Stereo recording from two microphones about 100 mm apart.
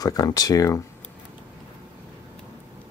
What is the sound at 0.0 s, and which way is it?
Speech, 40° left (ahead or behind).